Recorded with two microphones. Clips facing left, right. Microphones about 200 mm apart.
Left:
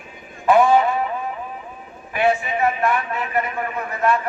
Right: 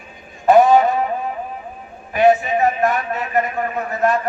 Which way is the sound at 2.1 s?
40° right (ahead or behind).